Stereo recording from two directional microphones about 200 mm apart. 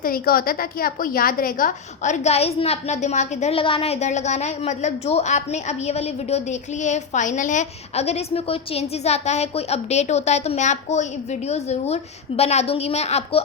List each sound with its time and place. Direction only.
0.0 s a woman's voice: 45° left (ahead or behind)